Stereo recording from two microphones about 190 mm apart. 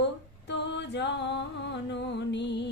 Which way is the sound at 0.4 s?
65° left (ahead or behind).